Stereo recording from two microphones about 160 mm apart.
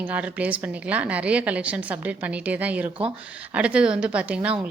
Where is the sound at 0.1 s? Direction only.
10° right (ahead or behind).